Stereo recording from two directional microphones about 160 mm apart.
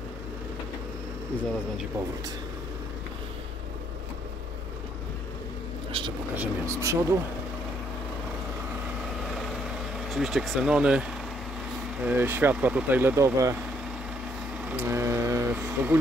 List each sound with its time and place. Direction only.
5.9 s vehicle: 35° right (ahead or behind)
6.3 s speech: 15° right (ahead or behind)
10.0 s speech: centre (ahead or behind); by 13.6 s 20° right (ahead or behind)
14.6 s vehicle: 10° right (ahead or behind)
15.5 s speech: 10° right (ahead or behind)